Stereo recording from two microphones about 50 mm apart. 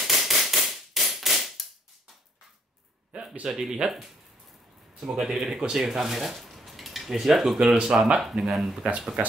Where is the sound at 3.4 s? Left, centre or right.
Centre.